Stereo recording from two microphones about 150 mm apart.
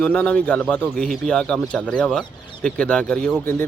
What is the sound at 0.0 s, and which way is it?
Speech, 10° left (ahead or behind).